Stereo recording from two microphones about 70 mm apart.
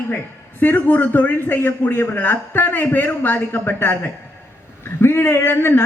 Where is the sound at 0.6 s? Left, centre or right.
Left.